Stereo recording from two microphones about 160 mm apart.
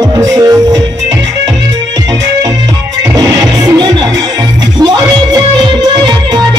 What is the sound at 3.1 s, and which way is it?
Music, 25° right (ahead or behind).